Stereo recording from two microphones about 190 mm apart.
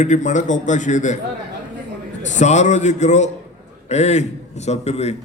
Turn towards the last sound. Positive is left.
turn(degrees=35)  # may be behind; listen again after turning